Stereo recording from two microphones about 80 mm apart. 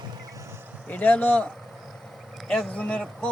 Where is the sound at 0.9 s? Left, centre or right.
Centre.